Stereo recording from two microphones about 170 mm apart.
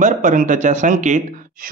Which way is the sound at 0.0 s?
50° right (ahead or behind).